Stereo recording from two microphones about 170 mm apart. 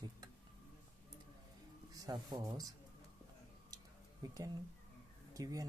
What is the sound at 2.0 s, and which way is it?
Speech, 20° right (ahead or behind).